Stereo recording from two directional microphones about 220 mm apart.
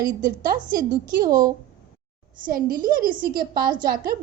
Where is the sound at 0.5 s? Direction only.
20° right (ahead or behind).